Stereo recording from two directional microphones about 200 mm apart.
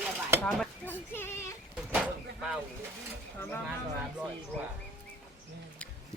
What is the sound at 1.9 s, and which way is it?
Door, 5° right (ahead or behind).